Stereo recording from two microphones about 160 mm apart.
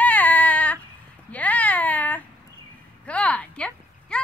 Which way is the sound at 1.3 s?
10° left (ahead or behind).